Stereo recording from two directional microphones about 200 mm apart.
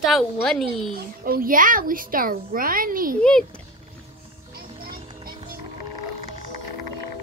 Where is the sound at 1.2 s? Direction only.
45° right (ahead or behind).